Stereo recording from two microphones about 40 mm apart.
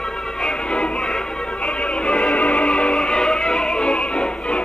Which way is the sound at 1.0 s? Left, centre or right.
Centre.